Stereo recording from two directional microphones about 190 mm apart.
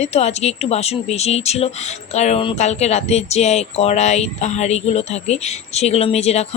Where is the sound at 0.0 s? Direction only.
35° left (ahead or behind).